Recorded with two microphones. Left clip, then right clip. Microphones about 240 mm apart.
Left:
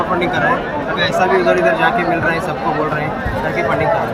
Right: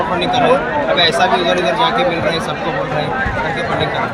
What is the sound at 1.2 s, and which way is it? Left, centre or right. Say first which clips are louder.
Speech: left 1 dB; centre.